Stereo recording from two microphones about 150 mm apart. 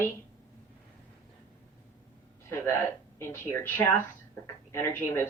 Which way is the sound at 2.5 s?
15° left (ahead or behind).